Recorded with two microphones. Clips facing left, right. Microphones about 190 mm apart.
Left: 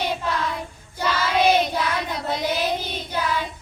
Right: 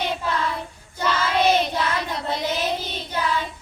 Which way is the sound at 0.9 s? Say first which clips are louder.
Even; 10° left (ahead or behind).